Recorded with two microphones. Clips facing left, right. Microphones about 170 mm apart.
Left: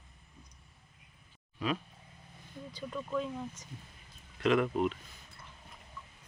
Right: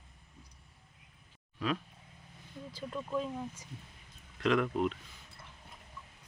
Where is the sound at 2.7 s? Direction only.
Centre (ahead or behind).